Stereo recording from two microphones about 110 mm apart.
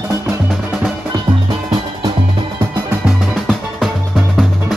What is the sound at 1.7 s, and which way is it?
Music, 45° right (ahead or behind).